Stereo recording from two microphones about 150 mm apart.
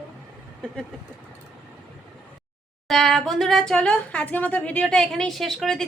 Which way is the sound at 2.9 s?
Centre (ahead or behind).